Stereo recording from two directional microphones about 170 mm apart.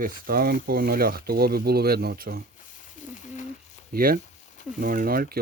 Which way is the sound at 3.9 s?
60° right (ahead or behind).